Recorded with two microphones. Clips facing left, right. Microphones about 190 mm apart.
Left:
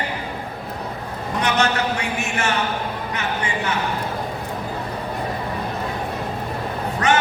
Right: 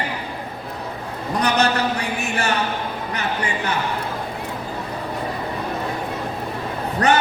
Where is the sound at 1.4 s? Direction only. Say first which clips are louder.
Right 1 dB; 35° right (ahead or behind).